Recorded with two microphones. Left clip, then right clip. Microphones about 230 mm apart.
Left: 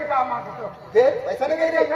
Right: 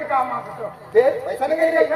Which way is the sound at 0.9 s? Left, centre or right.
Right.